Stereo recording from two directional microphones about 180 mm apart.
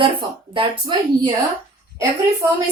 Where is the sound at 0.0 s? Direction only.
30° right (ahead or behind).